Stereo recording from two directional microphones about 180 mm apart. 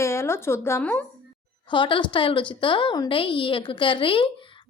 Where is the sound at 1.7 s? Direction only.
25° left (ahead or behind).